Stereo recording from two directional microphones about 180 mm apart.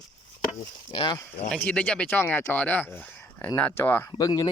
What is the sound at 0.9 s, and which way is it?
Speech, 35° left (ahead or behind).